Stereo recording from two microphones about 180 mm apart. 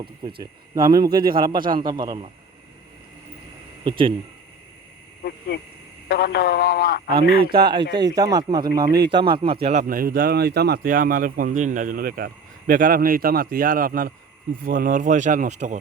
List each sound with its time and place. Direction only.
0.0 s speech: 30° right (ahead or behind)
3.8 s speech: 25° right (ahead or behind)
6.1 s speech: 65° left (ahead or behind)
7.7 s speech: 25° right (ahead or behind)
9.8 s speech: 50° right (ahead or behind)